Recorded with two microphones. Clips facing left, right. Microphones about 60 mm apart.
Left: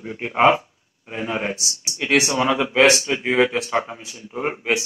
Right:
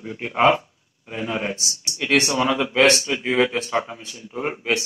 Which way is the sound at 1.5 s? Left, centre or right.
Centre.